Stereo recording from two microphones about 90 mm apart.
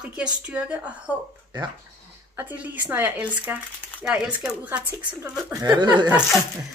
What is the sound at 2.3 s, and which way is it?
Speech, 15° right (ahead or behind).